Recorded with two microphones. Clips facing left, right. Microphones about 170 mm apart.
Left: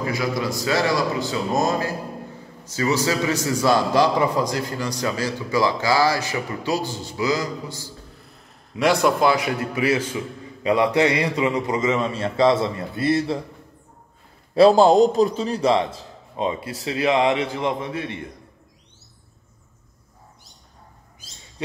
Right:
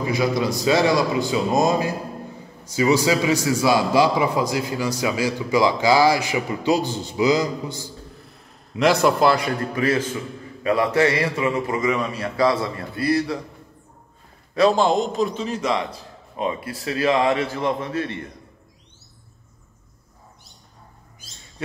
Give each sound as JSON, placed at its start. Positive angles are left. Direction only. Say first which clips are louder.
{"t": 0.0, "sound": "a man's voice", "louder": "right 3 dB", "side_deg": -20}
{"t": 8.8, "sound": "a man's voice", "louder": "right 1 dB", "side_deg": 0}
{"t": 14.5, "sound": "a man's voice", "louder": "left 4 dB", "side_deg": 35}
{"t": 21.6, "sound": "speech", "louder": "left 1 dB", "side_deg": 15}